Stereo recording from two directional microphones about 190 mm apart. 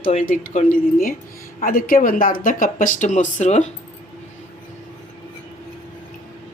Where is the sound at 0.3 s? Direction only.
45° left (ahead or behind).